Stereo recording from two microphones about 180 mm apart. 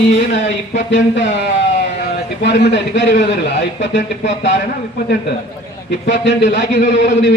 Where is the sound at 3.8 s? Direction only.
80° left.